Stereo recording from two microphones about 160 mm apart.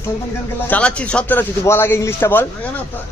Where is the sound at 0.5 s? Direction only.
10° left (ahead or behind).